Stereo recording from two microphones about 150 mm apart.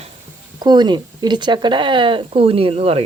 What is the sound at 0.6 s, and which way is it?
Speech, 30° right (ahead or behind).